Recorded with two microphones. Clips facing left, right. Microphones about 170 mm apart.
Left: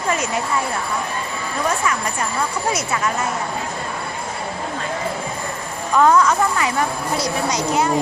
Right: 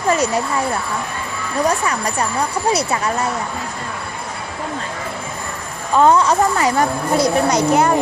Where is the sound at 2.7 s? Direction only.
35° right (ahead or behind).